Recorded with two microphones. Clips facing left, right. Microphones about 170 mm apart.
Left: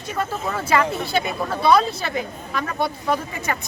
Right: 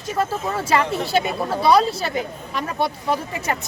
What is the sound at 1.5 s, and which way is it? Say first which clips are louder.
Speech: right 1 dB; 35° right (ahead or behind).